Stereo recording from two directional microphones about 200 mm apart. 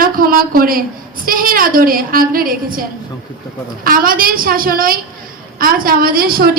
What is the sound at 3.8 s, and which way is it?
A woman's voice, 45° right (ahead or behind).